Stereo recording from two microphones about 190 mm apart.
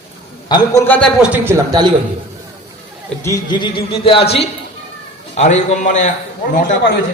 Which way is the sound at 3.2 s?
20° left (ahead or behind).